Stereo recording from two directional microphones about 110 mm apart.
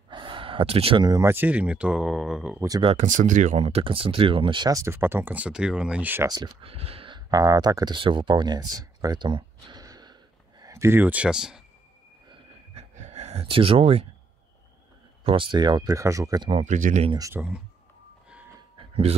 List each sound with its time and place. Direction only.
0.1 s gasp: 50° right (ahead or behind)
1.0 s speech: 30° right (ahead or behind)
1.3 s speech: 15° right (ahead or behind)
2.8 s speech: 75° right (ahead or behind); by 4.7 s 45° right (ahead or behind)
4.7 s speech: 20° right (ahead or behind)
6.2 s speech: 40° right (ahead or behind)
6.6 s speech: 60° right (ahead or behind)
7.2 s speech: 35° right (ahead or behind)
10.6 s speech: 25° right (ahead or behind); by 11.6 s 5° right (ahead or behind)
12.7 s a sound: 85° right
13.5 s speech: 55° right (ahead or behind)
15.2 s speech: 45° right (ahead or behind); by 16.4 s 30° right (ahead or behind)
16.4 s speech: 80° right
17.4 s speech: 15° right (ahead or behind)